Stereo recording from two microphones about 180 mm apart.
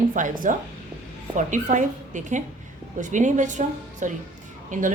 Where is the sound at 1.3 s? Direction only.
45° right (ahead or behind).